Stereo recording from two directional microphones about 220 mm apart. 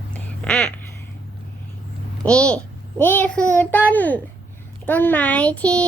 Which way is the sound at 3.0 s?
10° left (ahead or behind).